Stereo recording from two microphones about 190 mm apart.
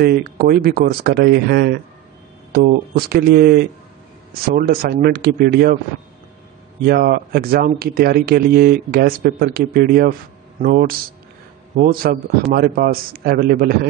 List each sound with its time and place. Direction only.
0.0 s speech: 60° right (ahead or behind)
6.8 s speech: 50° right (ahead or behind)